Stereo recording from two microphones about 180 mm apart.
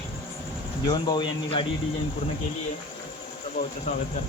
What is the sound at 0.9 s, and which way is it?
Speech, 25° left (ahead or behind).